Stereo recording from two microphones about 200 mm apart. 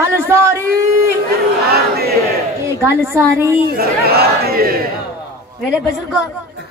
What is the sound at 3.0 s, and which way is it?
Speech, 15° right (ahead or behind).